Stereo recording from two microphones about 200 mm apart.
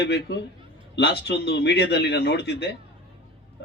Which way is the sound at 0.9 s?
60° left (ahead or behind).